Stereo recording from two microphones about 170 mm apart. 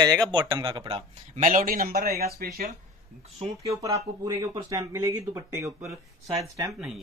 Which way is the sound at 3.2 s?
35° right (ahead or behind).